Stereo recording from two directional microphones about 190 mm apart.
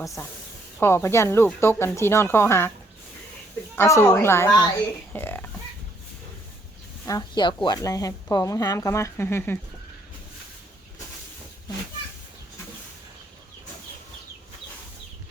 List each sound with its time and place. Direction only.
0.8 s speech: 15° left (ahead or behind)
3.8 s speech: 15° left (ahead or behind)
7.0 s speech: 20° left (ahead or behind)